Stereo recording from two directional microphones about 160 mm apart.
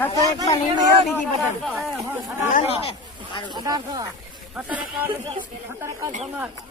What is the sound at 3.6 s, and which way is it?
Speech, 25° right (ahead or behind).